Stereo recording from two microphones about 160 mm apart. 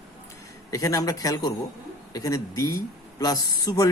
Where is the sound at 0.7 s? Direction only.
20° left (ahead or behind).